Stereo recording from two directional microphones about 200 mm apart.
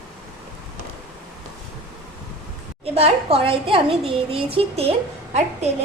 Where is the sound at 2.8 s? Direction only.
30° right (ahead or behind).